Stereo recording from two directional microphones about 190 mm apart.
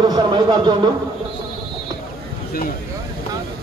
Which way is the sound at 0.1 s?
25° right (ahead or behind).